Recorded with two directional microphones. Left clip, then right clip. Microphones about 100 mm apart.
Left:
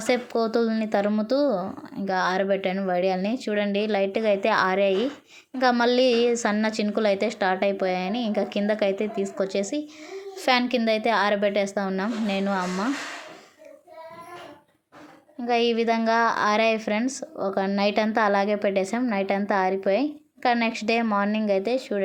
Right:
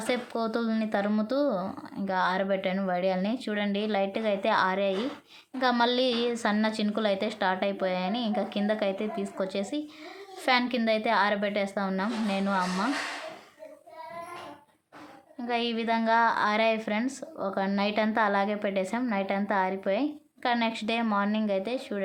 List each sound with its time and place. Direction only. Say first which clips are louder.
0.0 s a woman's voice: left 6 dB; 40° left (ahead or behind)
15.4 s a woman's voice: left 7 dB; 45° left (ahead or behind)